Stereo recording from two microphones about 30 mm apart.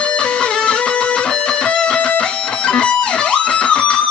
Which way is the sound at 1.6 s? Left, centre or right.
Left.